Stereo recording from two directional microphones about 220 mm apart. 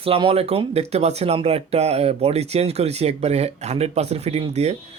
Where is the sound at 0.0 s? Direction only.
25° right (ahead or behind).